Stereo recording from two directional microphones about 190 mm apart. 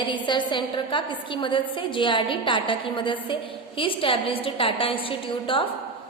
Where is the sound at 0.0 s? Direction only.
25° left (ahead or behind).